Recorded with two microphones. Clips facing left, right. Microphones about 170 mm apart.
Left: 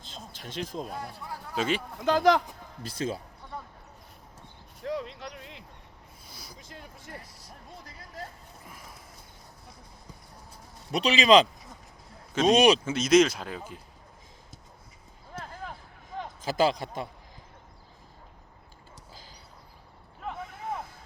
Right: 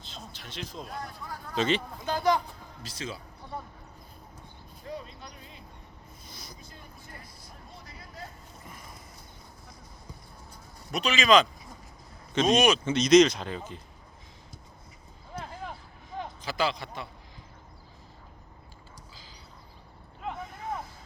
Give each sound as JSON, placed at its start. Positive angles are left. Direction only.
{"t": 0.1, "sound": "speech", "side_deg": 45}
{"t": 1.5, "sound": "speech", "side_deg": 10}
{"t": 2.0, "sound": "speech", "side_deg": 90}
{"t": 2.8, "sound": "speech", "side_deg": 50}
{"t": 4.8, "sound": "a sound", "side_deg": 85}
{"t": 6.2, "sound": "a sound", "side_deg": 5}
{"t": 6.6, "sound": "music", "side_deg": 90}
{"t": 8.6, "sound": "a sound", "side_deg": 5}
{"t": 10.9, "sound": "speech", "side_deg": 35}
{"t": 12.3, "sound": "speech", "side_deg": 5}
{"t": 12.5, "sound": "speech", "side_deg": 35}
{"t": 12.8, "sound": "speech", "side_deg": 5}
{"t": 16.4, "sound": "speech", "side_deg": 45}
{"t": 20.4, "sound": "a sound", "side_deg": 10}